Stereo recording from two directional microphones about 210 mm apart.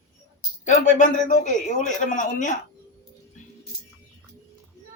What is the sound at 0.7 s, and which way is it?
A man's voice, 35° left (ahead or behind).